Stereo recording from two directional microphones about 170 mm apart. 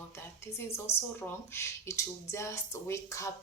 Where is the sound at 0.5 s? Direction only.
15° left (ahead or behind).